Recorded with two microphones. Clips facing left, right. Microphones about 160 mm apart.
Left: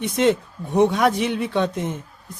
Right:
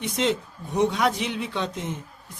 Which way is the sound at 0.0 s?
55° left (ahead or behind).